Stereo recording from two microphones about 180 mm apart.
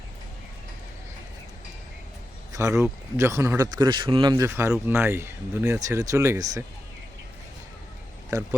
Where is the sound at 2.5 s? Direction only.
15° right (ahead or behind).